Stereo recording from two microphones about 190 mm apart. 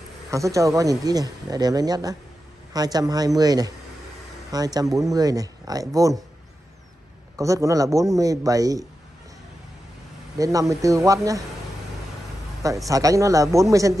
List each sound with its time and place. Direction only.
0.3 s speech: 15° right (ahead or behind)
7.3 s a man's voice: 15° right (ahead or behind)
10.3 s a man's voice: 15° right (ahead or behind)
12.6 s a man's voice: 15° right (ahead or behind)